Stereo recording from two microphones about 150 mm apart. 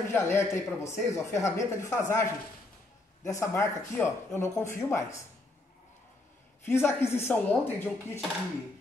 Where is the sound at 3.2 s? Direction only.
20° left (ahead or behind).